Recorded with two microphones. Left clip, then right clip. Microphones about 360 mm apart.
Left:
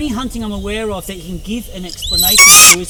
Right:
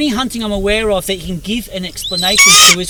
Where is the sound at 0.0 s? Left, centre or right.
Right.